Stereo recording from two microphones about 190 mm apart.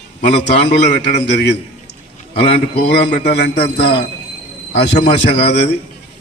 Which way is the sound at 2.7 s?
60° left (ahead or behind).